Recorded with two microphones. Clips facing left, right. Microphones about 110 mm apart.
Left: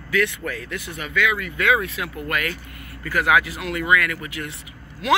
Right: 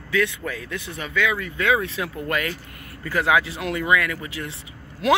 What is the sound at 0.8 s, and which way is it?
Speech, 30° right (ahead or behind).